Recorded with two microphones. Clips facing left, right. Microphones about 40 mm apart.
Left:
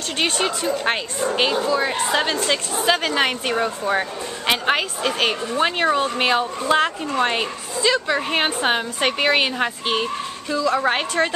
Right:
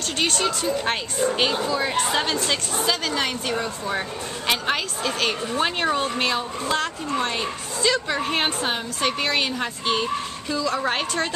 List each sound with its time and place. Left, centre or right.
0.2 s speech: centre
2.8 s a woman's voice: left
5.5 s speech: centre
6.1 s speech: left
7.8 s speech: centre
8.6 s speech: left
10.5 s speech: centre